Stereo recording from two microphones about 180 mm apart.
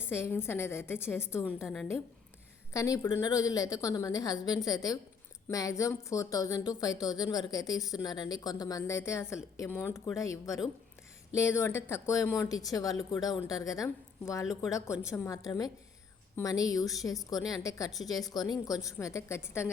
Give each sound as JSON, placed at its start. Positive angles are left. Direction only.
{"t": 0.1, "sound": "a woman's voice", "side_deg": 15}
{"t": 2.7, "sound": "a woman's voice", "side_deg": 20}